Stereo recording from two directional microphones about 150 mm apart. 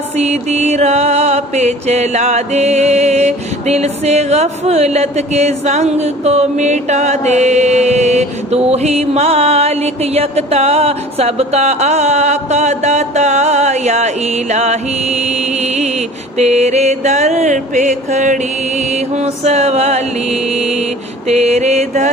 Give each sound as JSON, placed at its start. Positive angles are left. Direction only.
{"t": 0.2, "sound": "mantra", "side_deg": -45}